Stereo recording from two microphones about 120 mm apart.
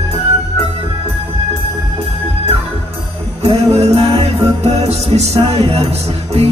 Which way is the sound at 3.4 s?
60° right (ahead or behind).